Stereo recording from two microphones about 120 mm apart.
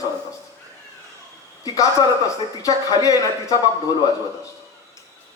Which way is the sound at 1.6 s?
30° left (ahead or behind).